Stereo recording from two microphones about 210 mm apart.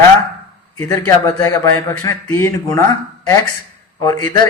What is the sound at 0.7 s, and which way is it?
A man's voice, 15° left (ahead or behind).